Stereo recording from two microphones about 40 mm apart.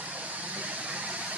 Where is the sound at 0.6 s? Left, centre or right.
Right.